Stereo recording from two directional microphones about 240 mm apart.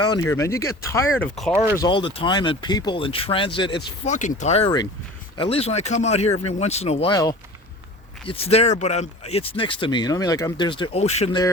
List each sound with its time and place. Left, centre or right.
0.0 s speech: centre
4.1 s speech: left